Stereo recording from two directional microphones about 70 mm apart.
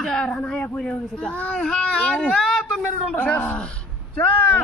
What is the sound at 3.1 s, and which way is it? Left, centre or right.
Speech, left.